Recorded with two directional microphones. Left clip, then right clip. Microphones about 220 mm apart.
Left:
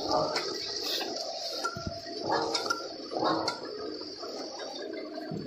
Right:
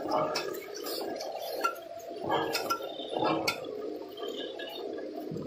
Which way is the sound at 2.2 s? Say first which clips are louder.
Left 1 dB; 15° right (ahead or behind).